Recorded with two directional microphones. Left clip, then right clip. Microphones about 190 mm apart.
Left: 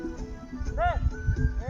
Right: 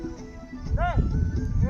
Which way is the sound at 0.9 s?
10° right (ahead or behind).